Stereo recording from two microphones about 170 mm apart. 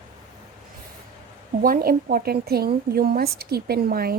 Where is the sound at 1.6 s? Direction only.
60° right (ahead or behind).